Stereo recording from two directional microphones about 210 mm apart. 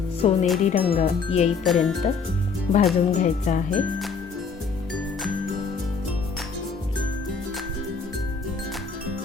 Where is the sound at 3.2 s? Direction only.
35° left (ahead or behind).